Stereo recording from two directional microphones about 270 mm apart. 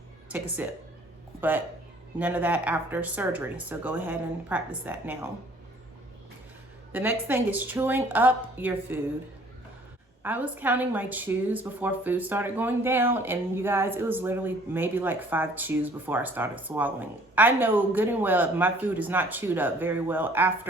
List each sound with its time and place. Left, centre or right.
0.3 s a woman's voice: centre
6.9 s a woman's voice: centre
10.2 s a woman's voice: centre